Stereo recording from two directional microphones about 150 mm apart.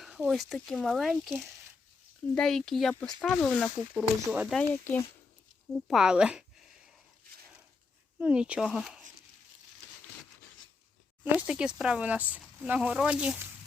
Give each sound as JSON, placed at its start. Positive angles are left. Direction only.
{"t": 0.0, "sound": "speech", "side_deg": -5}
{"t": 1.1, "sound": "speech", "side_deg": -10}
{"t": 2.3, "sound": "speech", "side_deg": 5}
{"t": 3.9, "sound": "speech", "side_deg": -5}
{"t": 4.5, "sound": "speech", "side_deg": 10}
{"t": 5.9, "sound": "a sound", "side_deg": -5}
{"t": 8.2, "sound": "speech", "side_deg": -5}
{"t": 11.2, "sound": "speech", "side_deg": -10}